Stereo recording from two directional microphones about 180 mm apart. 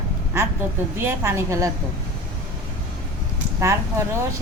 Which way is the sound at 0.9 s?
15° right (ahead or behind).